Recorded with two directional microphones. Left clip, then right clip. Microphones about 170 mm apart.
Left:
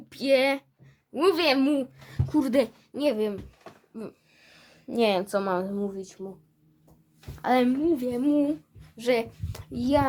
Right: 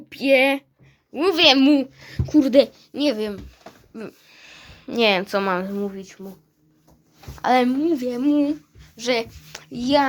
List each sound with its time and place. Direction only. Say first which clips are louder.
0.1 s a woman's voice: right 5 dB; 5° right (ahead or behind)
3.9 s a sound: right 4 dB; 15° right (ahead or behind)
4.5 s a woman's voice: right 4 dB; 5° right (ahead or behind)
5.6 s speech: right 4 dB; 30° right (ahead or behind)
5.9 s speech: even; 10° right (ahead or behind)
7.3 s speech: right 5 dB; 10° right (ahead or behind)
8.3 s a child's voice: right 5 dB; 10° left (ahead or behind)
9.8 s speech: right 5 dB; 10° right (ahead or behind)